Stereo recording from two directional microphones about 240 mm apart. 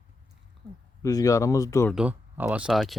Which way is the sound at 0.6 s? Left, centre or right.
Centre.